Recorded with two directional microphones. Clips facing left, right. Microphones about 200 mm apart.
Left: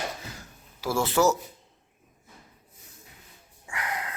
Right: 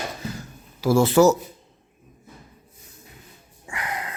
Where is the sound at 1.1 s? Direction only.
30° right (ahead or behind).